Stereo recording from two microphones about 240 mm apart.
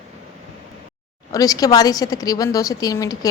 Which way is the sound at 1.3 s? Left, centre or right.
Centre.